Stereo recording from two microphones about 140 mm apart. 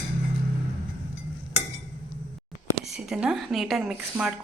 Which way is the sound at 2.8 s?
5° right (ahead or behind).